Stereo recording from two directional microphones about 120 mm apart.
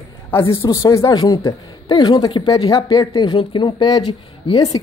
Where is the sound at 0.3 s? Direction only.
25° left (ahead or behind).